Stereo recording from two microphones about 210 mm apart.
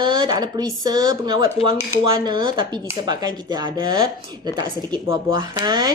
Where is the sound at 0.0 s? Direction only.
20° right (ahead or behind).